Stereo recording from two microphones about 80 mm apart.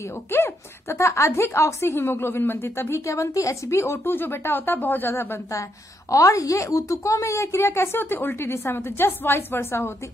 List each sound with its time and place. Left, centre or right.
0.3 s a woman's voice: left